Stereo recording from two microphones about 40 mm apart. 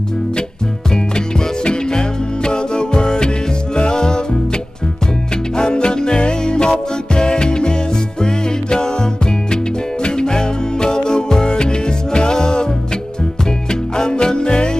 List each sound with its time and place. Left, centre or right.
0.9 s music: left
5.6 s music: left
13.7 s music: centre